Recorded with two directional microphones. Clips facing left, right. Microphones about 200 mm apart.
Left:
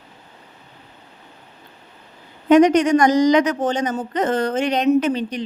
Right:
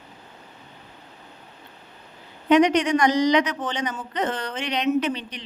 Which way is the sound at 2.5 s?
45° left (ahead or behind).